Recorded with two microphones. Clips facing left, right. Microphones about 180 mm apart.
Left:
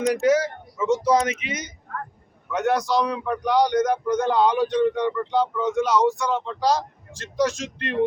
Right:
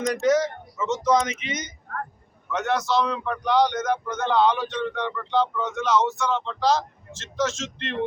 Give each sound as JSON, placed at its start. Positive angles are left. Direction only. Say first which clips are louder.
{"t": 0.1, "sound": "speech", "louder": "even", "side_deg": 10}